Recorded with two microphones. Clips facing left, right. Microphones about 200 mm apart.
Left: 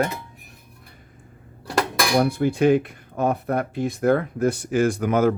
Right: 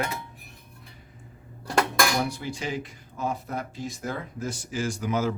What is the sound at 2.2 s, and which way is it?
Speech, 55° left (ahead or behind).